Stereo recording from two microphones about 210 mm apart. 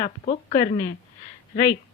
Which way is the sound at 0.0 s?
30° left (ahead or behind).